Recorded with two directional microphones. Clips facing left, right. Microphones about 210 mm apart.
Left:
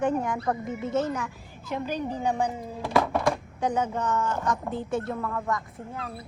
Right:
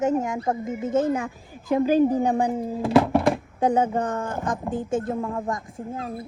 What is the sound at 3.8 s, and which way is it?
A woman's voice, 55° right (ahead or behind).